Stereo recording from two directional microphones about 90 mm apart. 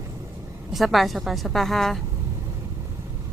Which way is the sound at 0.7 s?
Centre (ahead or behind).